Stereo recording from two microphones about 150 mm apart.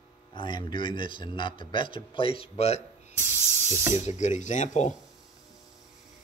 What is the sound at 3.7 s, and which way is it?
Speech, 20° right (ahead or behind).